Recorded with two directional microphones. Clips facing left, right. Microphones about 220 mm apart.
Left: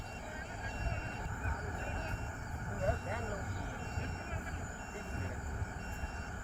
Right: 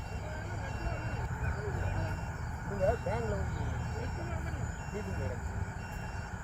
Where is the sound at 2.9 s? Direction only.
50° right (ahead or behind).